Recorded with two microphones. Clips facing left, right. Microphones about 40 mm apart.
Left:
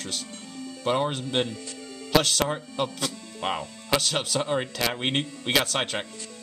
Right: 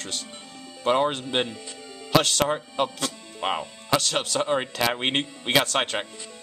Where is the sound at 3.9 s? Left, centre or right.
Centre.